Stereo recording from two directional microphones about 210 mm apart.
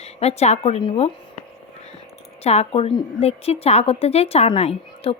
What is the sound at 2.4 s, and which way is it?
A woman's voice, 30° left (ahead or behind).